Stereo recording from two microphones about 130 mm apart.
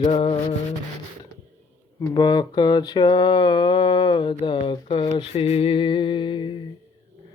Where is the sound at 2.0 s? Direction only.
35° left (ahead or behind).